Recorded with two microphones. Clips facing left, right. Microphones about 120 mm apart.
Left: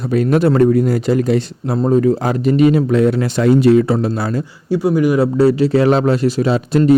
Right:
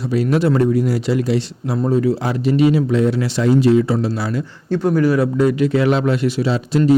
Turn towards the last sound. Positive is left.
turn(degrees=55)  # may be behind; listen again after turning